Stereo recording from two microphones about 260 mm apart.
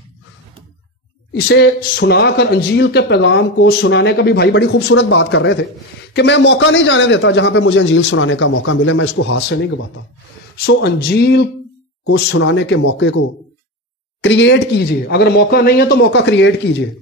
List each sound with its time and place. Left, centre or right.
1.3 s a man's voice: left
14.2 s speech: left